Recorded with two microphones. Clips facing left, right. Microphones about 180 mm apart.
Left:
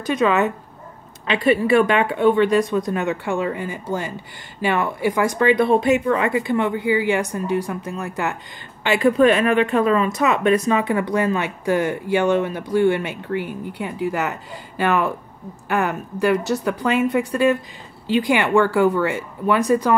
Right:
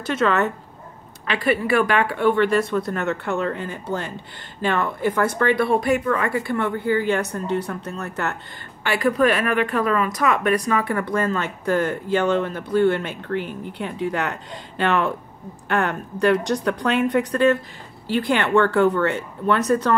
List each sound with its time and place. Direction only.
0.0 s speech: 15° left (ahead or behind)
1.2 s speech: 25° left (ahead or behind)
8.8 s speech: 25° left (ahead or behind)